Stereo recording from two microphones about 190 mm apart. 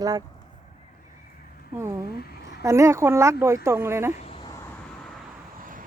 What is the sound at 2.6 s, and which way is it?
Speech, 15° right (ahead or behind).